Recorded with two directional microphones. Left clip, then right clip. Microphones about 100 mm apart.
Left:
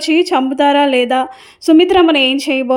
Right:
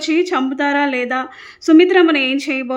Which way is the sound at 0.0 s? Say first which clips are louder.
Left 4 dB; 40° left (ahead or behind).